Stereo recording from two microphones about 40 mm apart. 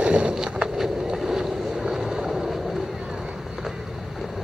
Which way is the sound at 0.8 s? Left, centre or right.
Centre.